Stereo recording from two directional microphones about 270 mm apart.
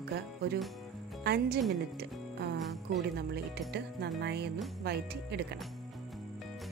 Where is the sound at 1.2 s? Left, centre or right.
Right.